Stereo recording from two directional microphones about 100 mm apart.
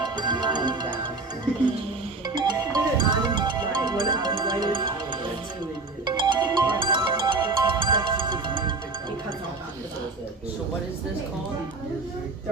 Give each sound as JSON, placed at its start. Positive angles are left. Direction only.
{"t": 0.0, "sound": "music", "side_deg": -45}
{"t": 2.2, "sound": "music", "side_deg": -45}